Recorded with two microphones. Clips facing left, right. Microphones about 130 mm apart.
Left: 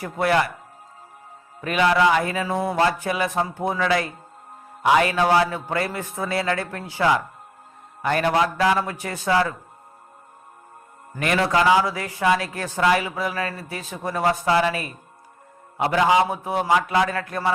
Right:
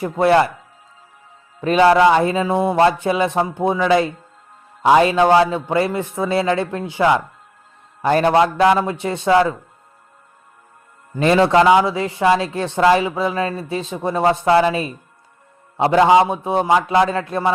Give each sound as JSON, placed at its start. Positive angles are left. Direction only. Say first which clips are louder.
{"t": 0.0, "sound": "speech", "louder": "right 6 dB", "side_deg": -25}
{"t": 1.6, "sound": "speech", "louder": "right 7 dB", "side_deg": -30}
{"t": 11.2, "sound": "speech", "louder": "right 7 dB", "side_deg": -25}